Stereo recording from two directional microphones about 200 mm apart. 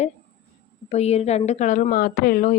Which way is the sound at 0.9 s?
30° left (ahead or behind).